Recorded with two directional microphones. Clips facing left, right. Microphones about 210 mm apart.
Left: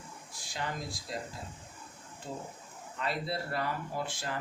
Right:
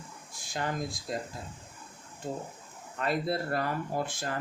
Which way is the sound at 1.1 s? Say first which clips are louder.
Right 4 dB; 45° right (ahead or behind).